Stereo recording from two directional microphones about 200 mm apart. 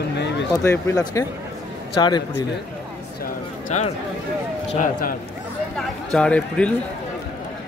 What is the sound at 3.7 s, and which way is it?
Speech, 35° left (ahead or behind).